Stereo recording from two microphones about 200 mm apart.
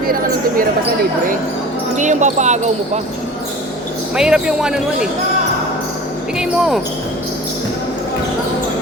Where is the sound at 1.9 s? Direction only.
35° right (ahead or behind).